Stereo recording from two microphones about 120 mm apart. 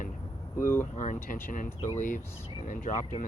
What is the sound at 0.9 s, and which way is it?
Speech, 90° left.